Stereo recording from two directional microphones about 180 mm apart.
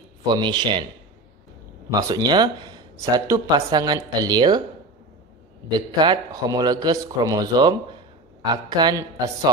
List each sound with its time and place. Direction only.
0.2 s speech: 25° right (ahead or behind)
1.9 s speech: 20° right (ahead or behind)
5.8 s speech: 25° right (ahead or behind)